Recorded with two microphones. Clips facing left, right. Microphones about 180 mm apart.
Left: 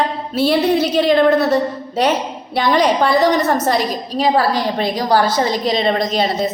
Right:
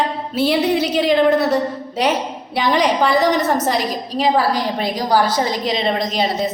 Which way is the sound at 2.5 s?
15° right (ahead or behind).